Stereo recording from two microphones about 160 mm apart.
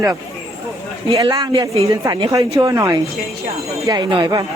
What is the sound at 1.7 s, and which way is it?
Speech, 40° right (ahead or behind).